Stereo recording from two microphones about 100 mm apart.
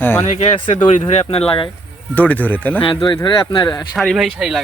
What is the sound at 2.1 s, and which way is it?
Speech, 15° left (ahead or behind).